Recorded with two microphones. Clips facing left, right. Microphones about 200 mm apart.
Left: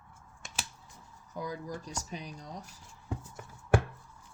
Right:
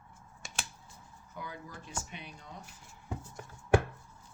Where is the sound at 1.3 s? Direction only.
35° left (ahead or behind).